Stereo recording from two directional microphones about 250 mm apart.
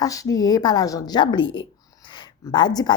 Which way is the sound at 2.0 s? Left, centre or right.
Centre.